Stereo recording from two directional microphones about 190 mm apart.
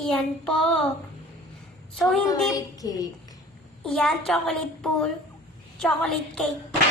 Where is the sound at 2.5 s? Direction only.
20° left (ahead or behind).